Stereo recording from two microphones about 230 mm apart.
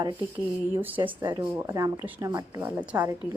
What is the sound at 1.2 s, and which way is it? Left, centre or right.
Speech, centre.